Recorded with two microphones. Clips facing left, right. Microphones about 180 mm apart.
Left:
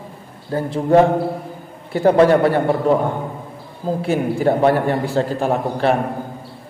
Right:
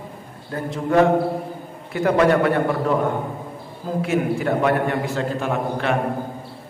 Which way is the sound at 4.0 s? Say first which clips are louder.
Left 1 dB; 30° left (ahead or behind).